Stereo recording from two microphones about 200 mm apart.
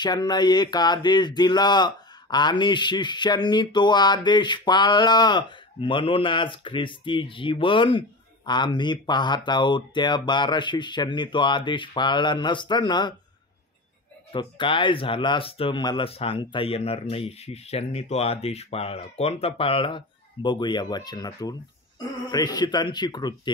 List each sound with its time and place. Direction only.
0.0 s speech: 20° left (ahead or behind)
14.3 s speech: 25° left (ahead or behind)